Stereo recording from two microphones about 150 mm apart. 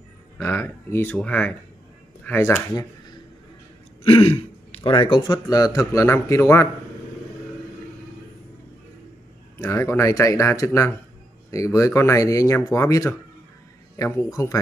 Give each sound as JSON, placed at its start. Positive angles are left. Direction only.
{"t": 0.4, "sound": "speech", "side_deg": 15}
{"t": 4.0, "sound": "speech", "side_deg": 35}
{"t": 9.6, "sound": "speech", "side_deg": 20}